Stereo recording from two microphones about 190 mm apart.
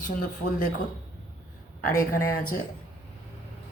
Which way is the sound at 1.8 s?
45° left (ahead or behind).